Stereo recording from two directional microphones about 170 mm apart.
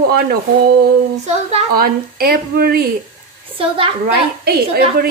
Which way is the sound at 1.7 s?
60° right (ahead or behind).